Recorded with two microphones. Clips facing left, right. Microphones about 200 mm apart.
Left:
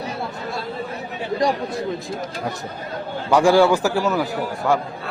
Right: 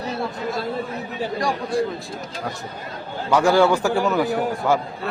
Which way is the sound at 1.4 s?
20° left (ahead or behind).